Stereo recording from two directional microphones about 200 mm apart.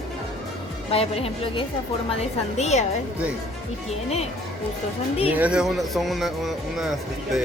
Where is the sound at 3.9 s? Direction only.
30° left (ahead or behind).